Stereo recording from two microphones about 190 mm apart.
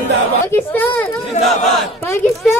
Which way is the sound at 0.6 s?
10° left (ahead or behind).